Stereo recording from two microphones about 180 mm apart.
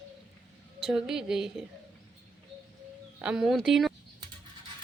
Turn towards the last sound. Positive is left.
turn(degrees=0)  # may be behind; listen again after turning